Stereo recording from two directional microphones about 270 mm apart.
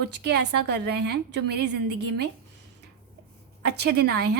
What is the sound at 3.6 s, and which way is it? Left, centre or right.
Speech, right.